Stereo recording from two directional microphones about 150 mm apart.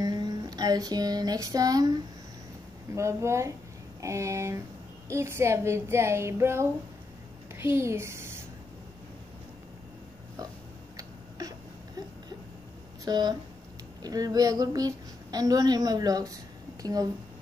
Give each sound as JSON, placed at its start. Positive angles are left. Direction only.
{"t": 0.0, "sound": "a sound", "side_deg": -25}
{"t": 2.9, "sound": "a woman's voice", "side_deg": -20}
{"t": 11.0, "sound": "tick-tock", "side_deg": -25}
{"t": 13.0, "sound": "a woman's voice", "side_deg": -25}